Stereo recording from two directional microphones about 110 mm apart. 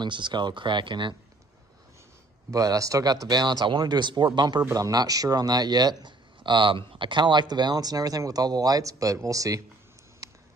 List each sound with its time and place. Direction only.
0.0 s speech: 45° right (ahead or behind)
2.5 s speech: 30° right (ahead or behind)
10.2 s a sound: 30° right (ahead or behind)